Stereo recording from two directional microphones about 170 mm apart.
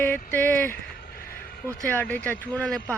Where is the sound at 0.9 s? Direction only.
60° left (ahead or behind).